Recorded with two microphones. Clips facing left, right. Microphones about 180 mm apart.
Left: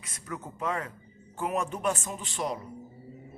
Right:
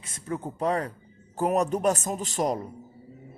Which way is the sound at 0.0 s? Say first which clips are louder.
Right 7 dB; 30° right (ahead or behind).